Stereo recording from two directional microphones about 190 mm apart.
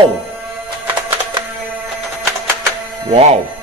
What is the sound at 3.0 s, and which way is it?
Speech, 30° right (ahead or behind).